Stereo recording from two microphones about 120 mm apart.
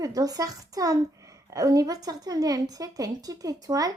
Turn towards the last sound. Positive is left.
turn(degrees=-30)  # may be behind; listen again after turning